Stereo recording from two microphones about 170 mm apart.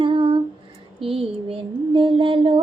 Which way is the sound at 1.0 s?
35° right (ahead or behind).